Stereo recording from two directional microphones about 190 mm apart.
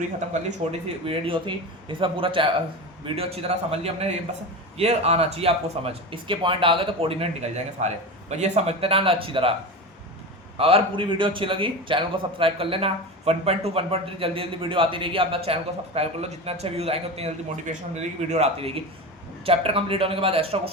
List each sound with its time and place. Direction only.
0.4 s a man's voice: 30° right (ahead or behind)
10.6 s a man's voice: 30° right (ahead or behind)